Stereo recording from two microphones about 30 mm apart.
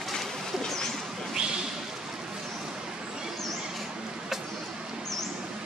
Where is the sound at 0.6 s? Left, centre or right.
Centre.